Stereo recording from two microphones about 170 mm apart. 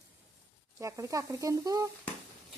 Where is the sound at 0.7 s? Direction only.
15° right (ahead or behind).